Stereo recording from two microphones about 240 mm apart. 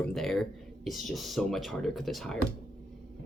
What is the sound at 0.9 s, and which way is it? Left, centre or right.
Speech, centre.